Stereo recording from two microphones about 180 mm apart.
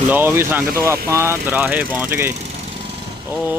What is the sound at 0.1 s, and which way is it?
Speech, 10° right (ahead or behind).